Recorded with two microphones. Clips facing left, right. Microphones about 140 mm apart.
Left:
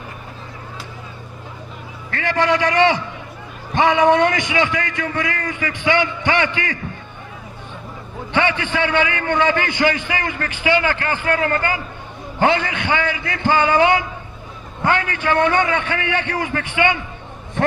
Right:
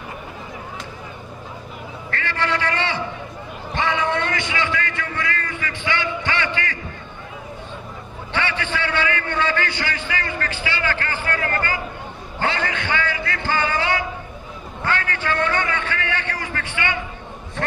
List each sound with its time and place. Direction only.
2.1 s a man's voice: 15° left (ahead or behind)
8.3 s a man's voice: 15° left (ahead or behind)